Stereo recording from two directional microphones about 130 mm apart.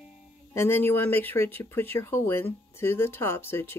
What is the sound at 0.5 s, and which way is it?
Speech, 20° left (ahead or behind).